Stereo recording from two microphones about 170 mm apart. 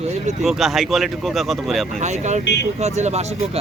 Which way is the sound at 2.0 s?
45° right (ahead or behind).